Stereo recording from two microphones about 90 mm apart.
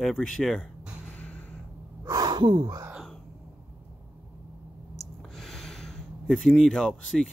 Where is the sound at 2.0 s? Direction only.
45° right (ahead or behind).